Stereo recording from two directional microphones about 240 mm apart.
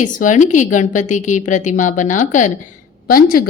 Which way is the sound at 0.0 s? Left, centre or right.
Left.